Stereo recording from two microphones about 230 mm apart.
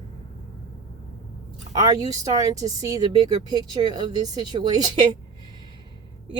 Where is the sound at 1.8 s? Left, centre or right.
Centre.